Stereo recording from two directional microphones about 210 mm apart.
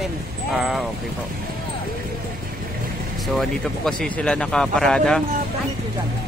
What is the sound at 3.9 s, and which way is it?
Speech, 5° left (ahead or behind).